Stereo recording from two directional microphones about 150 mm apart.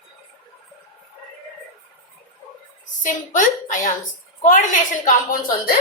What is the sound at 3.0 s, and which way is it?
A woman's voice, 60° left (ahead or behind).